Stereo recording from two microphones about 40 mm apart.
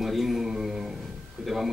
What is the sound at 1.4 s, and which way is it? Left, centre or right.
Speech, centre.